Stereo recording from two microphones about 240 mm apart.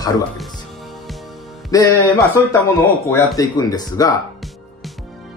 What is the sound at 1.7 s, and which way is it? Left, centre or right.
Speech, centre.